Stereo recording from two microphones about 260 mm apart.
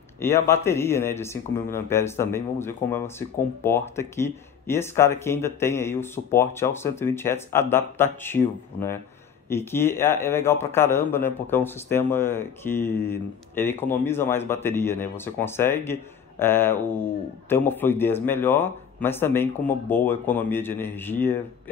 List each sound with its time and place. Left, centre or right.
0.2 s a man's voice: centre